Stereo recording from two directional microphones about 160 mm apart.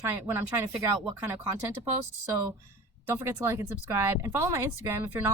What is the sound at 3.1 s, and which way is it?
A woman's voice, 15° right (ahead or behind).